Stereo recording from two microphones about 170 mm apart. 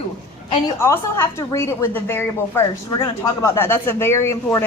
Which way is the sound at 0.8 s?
15° left (ahead or behind).